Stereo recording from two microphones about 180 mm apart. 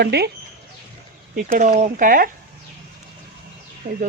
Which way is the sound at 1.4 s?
50° right (ahead or behind).